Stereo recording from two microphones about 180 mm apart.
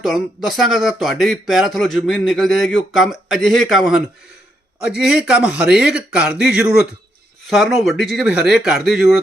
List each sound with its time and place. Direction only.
0.0 s speech: centre (ahead or behind)